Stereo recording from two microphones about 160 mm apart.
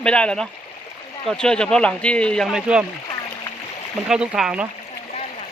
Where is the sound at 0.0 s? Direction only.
5° left (ahead or behind).